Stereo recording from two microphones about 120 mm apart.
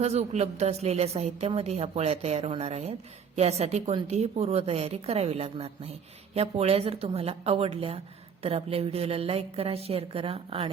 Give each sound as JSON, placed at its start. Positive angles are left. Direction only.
{"t": 0.0, "sound": "a woman's voice", "side_deg": -60}